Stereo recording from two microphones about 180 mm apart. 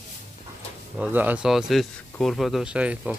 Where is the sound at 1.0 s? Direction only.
10° right (ahead or behind).